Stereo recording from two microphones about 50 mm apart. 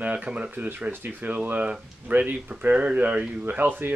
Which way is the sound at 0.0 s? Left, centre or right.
Right.